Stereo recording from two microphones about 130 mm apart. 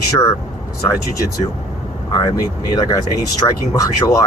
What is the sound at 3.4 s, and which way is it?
Speech, 25° left (ahead or behind).